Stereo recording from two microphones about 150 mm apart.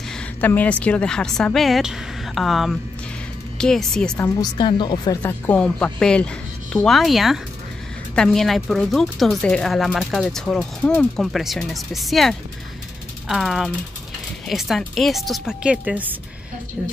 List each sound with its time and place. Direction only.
0.4 s speech: 10° left (ahead or behind)
4.2 s speech: 30° left (ahead or behind)
5.2 s speech: 10° left (ahead or behind); by 16.2 s 10° right (ahead or behind)